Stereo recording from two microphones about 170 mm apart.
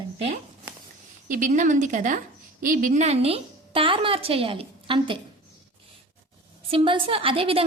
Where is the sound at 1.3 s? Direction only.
50° right (ahead or behind); by 5.2 s 30° right (ahead or behind).